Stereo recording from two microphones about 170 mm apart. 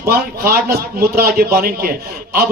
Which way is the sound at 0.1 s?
65° right (ahead or behind).